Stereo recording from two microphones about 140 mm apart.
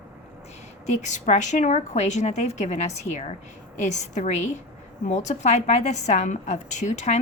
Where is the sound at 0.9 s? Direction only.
55° left (ahead or behind).